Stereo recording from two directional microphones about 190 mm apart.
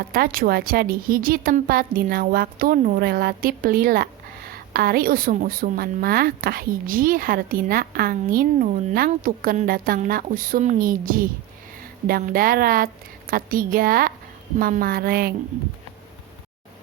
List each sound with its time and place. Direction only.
0.0 s a woman's voice: 50° right (ahead or behind)